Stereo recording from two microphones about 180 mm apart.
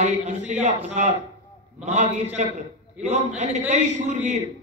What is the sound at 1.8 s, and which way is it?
A man's voice, 40° right (ahead or behind).